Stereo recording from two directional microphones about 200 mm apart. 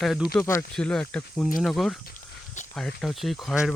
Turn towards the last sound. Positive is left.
turn(degrees=0)  # may be behind; listen again after turning